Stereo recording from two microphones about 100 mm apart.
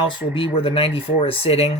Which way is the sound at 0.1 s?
55° left (ahead or behind).